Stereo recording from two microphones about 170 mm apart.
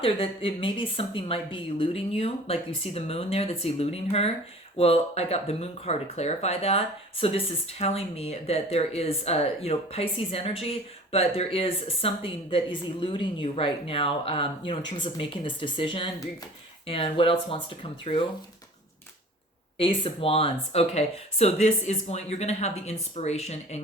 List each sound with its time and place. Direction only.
0.0 s speech: 35° left (ahead or behind)
19.8 s speech: 30° left (ahead or behind)